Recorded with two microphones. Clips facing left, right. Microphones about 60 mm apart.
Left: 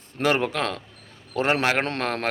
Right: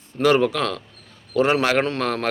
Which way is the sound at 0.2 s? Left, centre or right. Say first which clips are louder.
Right 5 dB; left.